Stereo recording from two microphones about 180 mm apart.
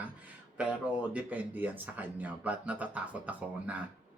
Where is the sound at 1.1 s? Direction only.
10° right (ahead or behind).